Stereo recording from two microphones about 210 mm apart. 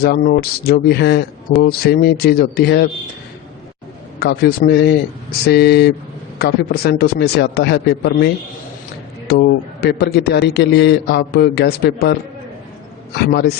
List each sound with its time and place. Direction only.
0.0 s speech: 50° left (ahead or behind)
4.2 s speech: 50° left (ahead or behind)
9.8 s speech: 50° left (ahead or behind)
13.1 s speech: 50° left (ahead or behind)